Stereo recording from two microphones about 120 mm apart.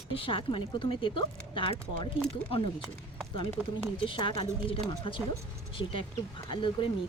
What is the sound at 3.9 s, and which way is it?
A woman's voice, 45° left (ahead or behind).